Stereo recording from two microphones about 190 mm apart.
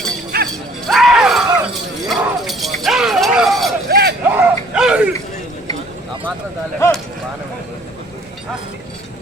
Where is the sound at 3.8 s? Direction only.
55° right (ahead or behind).